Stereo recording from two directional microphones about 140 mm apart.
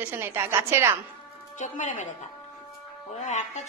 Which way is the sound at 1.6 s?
65° left (ahead or behind).